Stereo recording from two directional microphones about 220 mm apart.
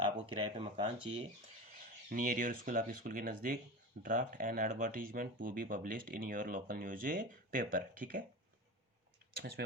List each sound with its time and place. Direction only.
0.3 s speech: 25° right (ahead or behind)
2.0 s speech: 40° right (ahead or behind)
9.6 s speech: 50° right (ahead or behind)